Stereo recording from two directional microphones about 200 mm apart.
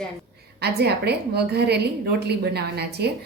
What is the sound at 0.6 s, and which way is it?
A woman's voice, 55° right (ahead or behind).